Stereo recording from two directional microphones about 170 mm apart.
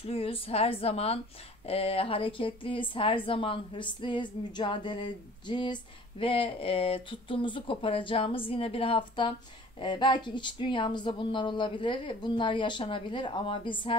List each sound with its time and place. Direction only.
0.0 s speech: 35° left (ahead or behind)